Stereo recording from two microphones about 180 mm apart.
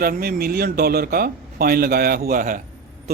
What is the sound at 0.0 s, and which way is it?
Speech, 55° right (ahead or behind).